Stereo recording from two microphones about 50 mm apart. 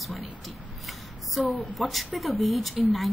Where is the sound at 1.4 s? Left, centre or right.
Centre.